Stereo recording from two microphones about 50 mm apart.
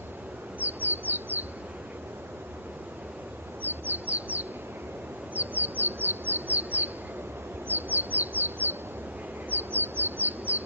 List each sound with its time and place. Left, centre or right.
0.6 s crow: right
3.6 s crow: right